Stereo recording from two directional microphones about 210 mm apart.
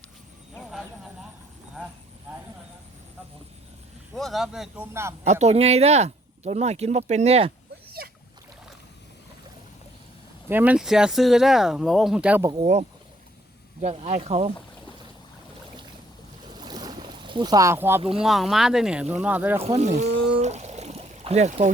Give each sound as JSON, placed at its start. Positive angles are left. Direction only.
{"t": 0.5, "sound": "a sound", "side_deg": 0}
{"t": 4.1, "sound": "speech", "side_deg": 0}
{"t": 5.2, "sound": "speech", "side_deg": -35}
{"t": 10.5, "sound": "speech", "side_deg": -5}
{"t": 13.8, "sound": "speech", "side_deg": -30}
{"t": 16.6, "sound": "boat", "side_deg": -20}
{"t": 18.2, "sound": "speech", "side_deg": 0}
{"t": 19.6, "sound": "speech", "side_deg": -30}
{"t": 20.4, "sound": "trickle", "side_deg": -35}